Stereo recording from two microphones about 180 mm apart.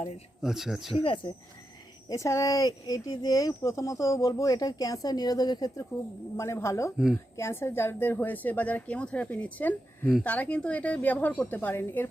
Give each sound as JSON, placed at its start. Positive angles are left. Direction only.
{"t": 0.4, "sound": "speech", "side_deg": 0}
{"t": 1.0, "sound": "speech", "side_deg": 30}
{"t": 2.0, "sound": "speech", "side_deg": 15}
{"t": 6.9, "sound": "speech", "side_deg": -5}
{"t": 7.3, "sound": "speech", "side_deg": 15}